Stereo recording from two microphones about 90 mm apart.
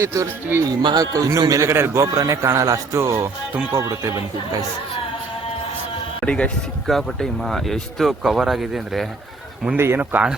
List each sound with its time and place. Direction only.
0.0 s speech: 30° right (ahead or behind)
0.8 s a man's voice: 60° right (ahead or behind)
1.1 s speech: 40° right (ahead or behind)
1.6 s speech: 30° right (ahead or behind)
6.2 s a man's voice: 15° left (ahead or behind)
6.8 s speech: centre (ahead or behind)
9.7 s speech: 25° right (ahead or behind)